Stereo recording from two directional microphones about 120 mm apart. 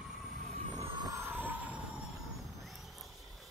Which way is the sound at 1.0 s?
25° right (ahead or behind).